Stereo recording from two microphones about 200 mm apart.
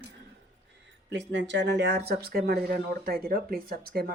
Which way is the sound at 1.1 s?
65° right (ahead or behind).